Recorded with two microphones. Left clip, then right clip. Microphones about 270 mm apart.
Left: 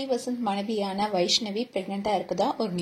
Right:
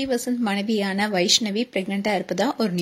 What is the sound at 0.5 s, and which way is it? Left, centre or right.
A woman's voice, right.